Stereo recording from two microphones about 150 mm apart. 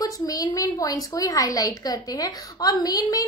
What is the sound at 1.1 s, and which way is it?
A woman's voice, 25° left (ahead or behind).